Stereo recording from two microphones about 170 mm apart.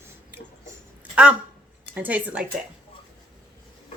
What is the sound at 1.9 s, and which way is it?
Speech, 10° right (ahead or behind).